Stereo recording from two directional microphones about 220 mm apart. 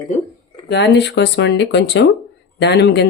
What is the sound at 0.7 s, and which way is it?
Speech, 50° left (ahead or behind).